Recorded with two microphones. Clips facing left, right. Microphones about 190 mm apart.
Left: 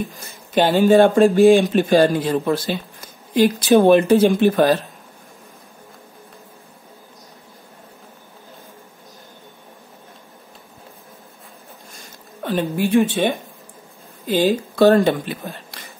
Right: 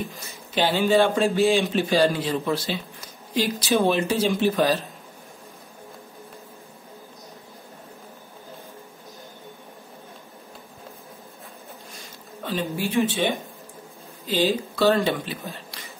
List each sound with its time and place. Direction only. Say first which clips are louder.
0.6 s speech: left 7 dB; 50° left (ahead or behind)
12.4 s speech: left 7 dB; 55° left (ahead or behind)